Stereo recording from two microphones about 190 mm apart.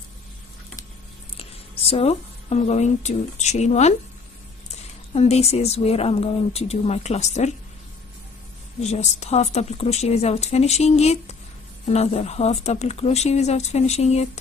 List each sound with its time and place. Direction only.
1.3 s speech: 30° left (ahead or behind)
5.1 s speech: 35° left (ahead or behind)
8.8 s speech: 35° left (ahead or behind)